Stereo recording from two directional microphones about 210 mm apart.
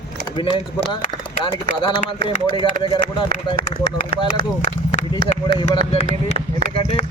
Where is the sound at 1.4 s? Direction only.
25° left (ahead or behind).